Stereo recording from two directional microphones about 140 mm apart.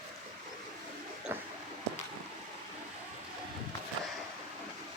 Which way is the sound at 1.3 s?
15° right (ahead or behind).